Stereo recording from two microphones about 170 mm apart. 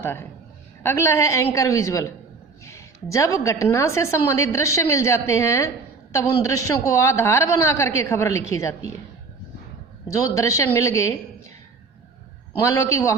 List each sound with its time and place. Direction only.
0.0 s a woman's voice: 15° left (ahead or behind)
10.2 s a woman's voice: 20° left (ahead or behind)
12.5 s a woman's voice: 20° left (ahead or behind)